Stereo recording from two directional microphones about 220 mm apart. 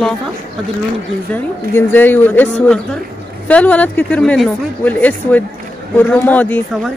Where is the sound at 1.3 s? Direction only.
10° left (ahead or behind).